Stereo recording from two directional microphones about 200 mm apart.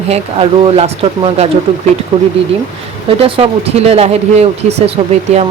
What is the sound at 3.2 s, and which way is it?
Speech, 30° right (ahead or behind).